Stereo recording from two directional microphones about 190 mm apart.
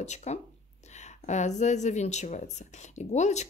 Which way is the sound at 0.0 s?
35° left (ahead or behind).